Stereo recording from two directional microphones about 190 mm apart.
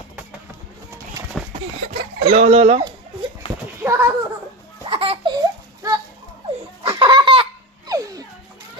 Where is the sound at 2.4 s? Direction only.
35° right (ahead or behind).